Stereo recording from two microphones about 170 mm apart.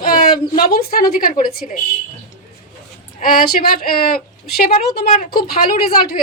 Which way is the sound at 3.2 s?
55° left (ahead or behind).